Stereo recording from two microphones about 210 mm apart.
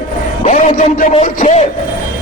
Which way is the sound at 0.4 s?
35° left (ahead or behind).